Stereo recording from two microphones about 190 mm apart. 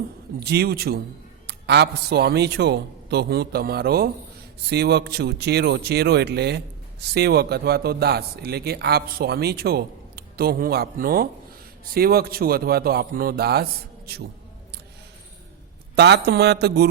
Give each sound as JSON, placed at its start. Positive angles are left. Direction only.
{"t": 0.3, "sound": "a man's voice", "side_deg": -60}
{"t": 16.0, "sound": "a man's voice", "side_deg": -60}